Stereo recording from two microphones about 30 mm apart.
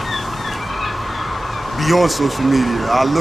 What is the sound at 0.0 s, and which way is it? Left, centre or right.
Fowl, centre.